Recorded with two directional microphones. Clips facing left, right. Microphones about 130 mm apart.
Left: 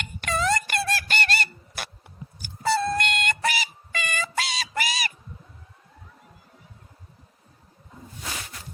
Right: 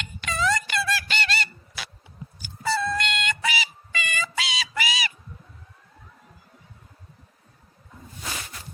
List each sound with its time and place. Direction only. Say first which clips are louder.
0.0 s music: left 1 dB; 50° left (ahead or behind)